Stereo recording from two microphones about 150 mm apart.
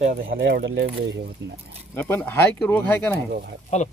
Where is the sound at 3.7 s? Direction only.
50° left (ahead or behind).